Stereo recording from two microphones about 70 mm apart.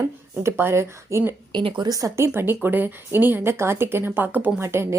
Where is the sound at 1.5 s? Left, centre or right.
Right.